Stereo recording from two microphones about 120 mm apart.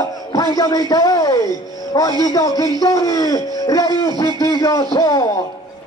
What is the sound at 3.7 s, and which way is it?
Music, 30° left (ahead or behind).